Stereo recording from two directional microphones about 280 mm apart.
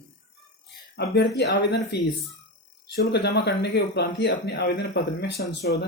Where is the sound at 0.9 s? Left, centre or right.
Left.